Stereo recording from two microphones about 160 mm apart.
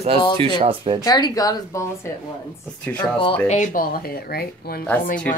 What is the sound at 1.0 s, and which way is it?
Speech, 25° left (ahead or behind).